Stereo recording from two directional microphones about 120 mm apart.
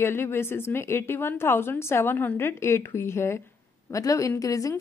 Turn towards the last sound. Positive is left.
turn(degrees=25)  # may be behind; listen again after turning